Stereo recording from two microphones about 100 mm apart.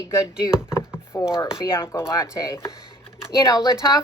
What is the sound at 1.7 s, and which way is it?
A woman's voice, 25° left (ahead or behind).